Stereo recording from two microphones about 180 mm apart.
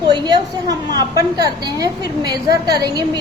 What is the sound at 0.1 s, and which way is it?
A woman's voice, 20° right (ahead or behind).